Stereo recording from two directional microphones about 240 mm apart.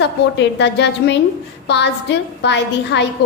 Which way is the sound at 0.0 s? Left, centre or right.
Left.